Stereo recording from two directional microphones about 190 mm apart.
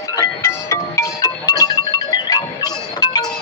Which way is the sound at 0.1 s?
15° left (ahead or behind).